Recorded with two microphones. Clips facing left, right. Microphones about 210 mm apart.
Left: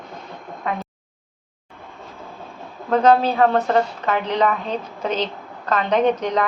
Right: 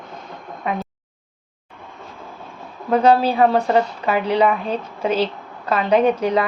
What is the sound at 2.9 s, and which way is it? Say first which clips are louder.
A woman's voice: right 1 dB; 10° right (ahead or behind).